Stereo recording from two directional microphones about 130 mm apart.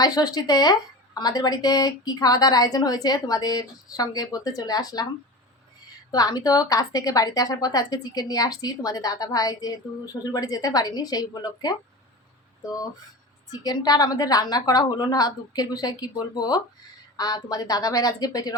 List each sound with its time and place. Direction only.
0.0 s a woman's voice: 30° left (ahead or behind)
6.1 s a woman's voice: 30° left (ahead or behind)
13.5 s a woman's voice: 30° left (ahead or behind)